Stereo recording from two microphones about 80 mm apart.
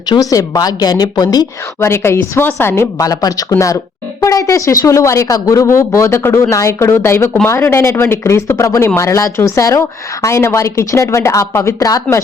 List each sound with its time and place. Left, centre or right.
0.2 s a woman's voice: left
1.8 s speech: left
3.0 s speech: left